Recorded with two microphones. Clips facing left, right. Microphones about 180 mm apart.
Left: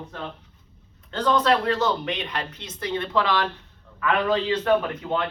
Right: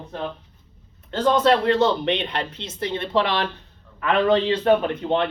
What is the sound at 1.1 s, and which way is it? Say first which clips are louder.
Speech: right 3 dB; 25° right (ahead or behind).